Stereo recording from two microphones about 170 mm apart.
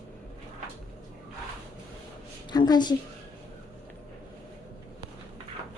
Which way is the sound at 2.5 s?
25° left (ahead or behind).